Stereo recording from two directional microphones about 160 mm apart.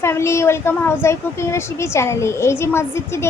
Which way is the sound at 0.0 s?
15° left (ahead or behind).